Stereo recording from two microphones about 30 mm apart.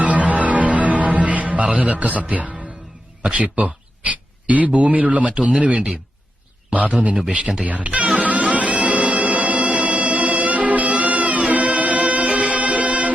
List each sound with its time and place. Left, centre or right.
0.0 s music: right
3.2 s speech: right
8.1 s music: right